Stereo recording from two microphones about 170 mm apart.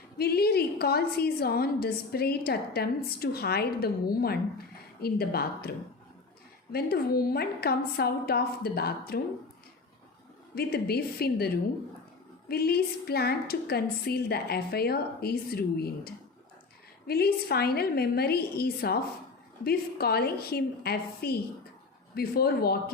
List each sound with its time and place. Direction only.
0.2 s a woman's voice: 65° left (ahead or behind)
6.7 s a woman's voice: 65° left (ahead or behind)
10.5 s a woman's voice: 65° left (ahead or behind)